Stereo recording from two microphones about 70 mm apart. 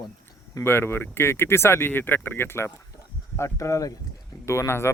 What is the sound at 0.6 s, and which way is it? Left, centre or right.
Speech, left.